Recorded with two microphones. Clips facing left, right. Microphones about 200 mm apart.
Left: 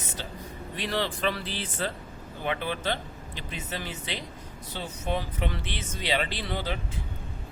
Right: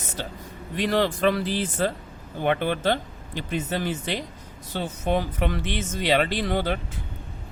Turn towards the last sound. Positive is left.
turn(degrees=-55)  # may be behind; listen again after turning